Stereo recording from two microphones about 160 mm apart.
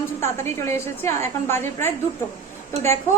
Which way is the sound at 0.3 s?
15° left (ahead or behind).